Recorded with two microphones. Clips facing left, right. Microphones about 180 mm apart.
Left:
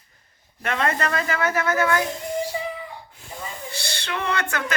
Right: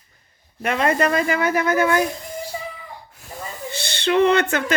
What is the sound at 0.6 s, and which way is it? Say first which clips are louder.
A man's voice: right 5 dB; 15° right (ahead or behind).